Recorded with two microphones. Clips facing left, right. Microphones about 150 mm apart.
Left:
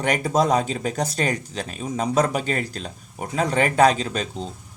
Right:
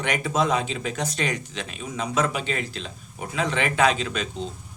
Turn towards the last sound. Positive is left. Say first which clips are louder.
# left 2 dB
turn(degrees=35)  # may be behind; listen again after turning